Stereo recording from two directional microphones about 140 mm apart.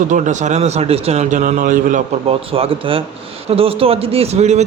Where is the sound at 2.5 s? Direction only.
40° right (ahead or behind).